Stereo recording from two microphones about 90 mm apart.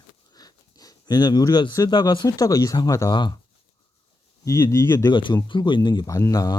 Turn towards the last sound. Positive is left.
turn(degrees=40)  # may be behind; listen again after turning